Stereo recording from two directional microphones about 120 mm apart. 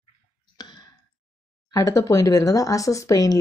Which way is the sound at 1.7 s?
30° left (ahead or behind).